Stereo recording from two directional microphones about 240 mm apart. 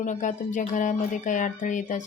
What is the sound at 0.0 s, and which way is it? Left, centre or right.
A woman's voice, left.